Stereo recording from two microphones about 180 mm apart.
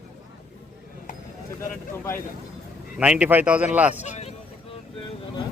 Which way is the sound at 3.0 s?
5° right (ahead or behind).